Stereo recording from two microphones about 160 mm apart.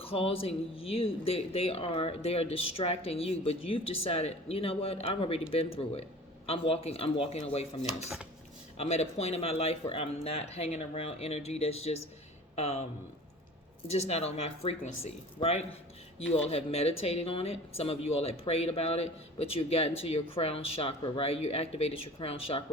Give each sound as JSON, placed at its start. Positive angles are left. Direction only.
{"t": 0.0, "sound": "speech", "side_deg": 35}
{"t": 13.9, "sound": "speech", "side_deg": 40}